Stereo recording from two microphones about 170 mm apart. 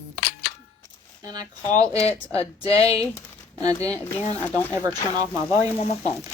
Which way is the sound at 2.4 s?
35° left (ahead or behind).